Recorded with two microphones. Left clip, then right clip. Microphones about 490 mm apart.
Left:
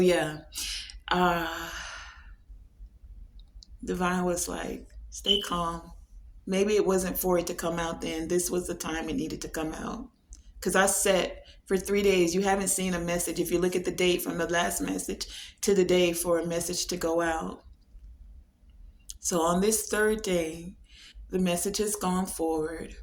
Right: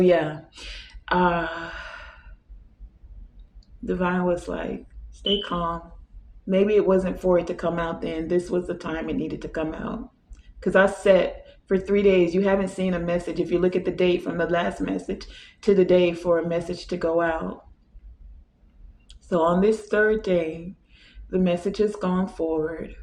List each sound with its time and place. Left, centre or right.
0.0 s a sound: left
3.8 s speech: left
19.0 s speech: left